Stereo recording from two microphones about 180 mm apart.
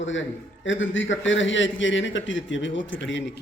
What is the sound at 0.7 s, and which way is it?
A man's voice, 90° left.